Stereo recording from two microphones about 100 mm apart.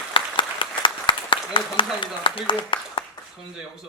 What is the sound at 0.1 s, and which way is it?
Applause, 55° left (ahead or behind).